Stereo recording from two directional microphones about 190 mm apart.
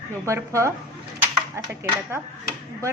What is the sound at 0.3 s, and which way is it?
A woman's voice, 15° right (ahead or behind).